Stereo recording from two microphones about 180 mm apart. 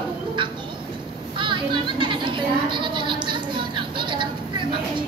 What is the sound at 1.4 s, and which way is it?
Children playing, 25° right (ahead or behind).